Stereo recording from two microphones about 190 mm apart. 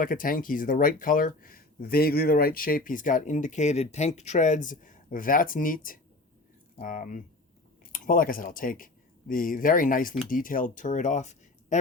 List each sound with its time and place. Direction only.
0.0 s speech: 45° left (ahead or behind)